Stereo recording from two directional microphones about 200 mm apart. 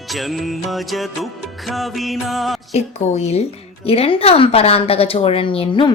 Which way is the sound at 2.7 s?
35° left (ahead or behind).